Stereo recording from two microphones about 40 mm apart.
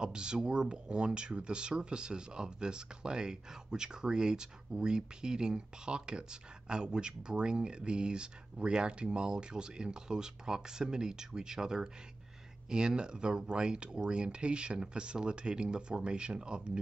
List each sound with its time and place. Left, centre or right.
0.0 s speech: right